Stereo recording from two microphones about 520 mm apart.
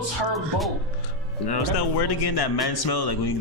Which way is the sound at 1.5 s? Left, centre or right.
Left.